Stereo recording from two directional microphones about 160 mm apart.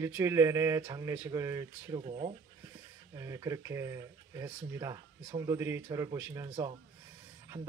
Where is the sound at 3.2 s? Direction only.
20° right (ahead or behind).